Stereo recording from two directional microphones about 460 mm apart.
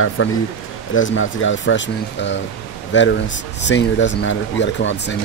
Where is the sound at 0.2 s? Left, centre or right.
Left.